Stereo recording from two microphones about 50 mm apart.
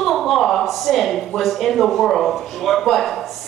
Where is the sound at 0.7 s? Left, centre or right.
Centre.